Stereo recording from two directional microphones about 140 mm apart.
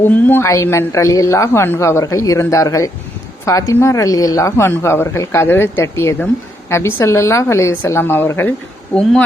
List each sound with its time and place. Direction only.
0.0 s speech: 15° left (ahead or behind)